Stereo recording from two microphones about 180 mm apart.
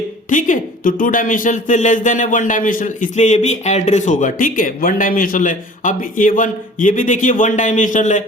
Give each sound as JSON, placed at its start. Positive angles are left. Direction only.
{"t": 0.3, "sound": "a man's voice", "side_deg": 45}